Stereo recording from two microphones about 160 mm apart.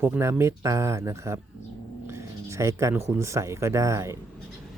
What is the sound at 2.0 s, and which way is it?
Music, 15° right (ahead or behind).